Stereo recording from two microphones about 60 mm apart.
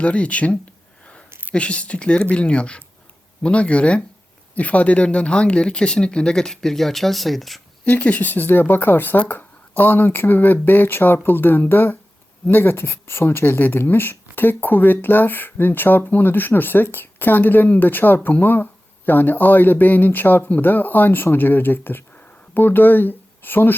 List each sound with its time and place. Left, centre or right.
0.0 s speech: left
1.3 s a sound: right
1.5 s speech: centre
7.9 s speech: left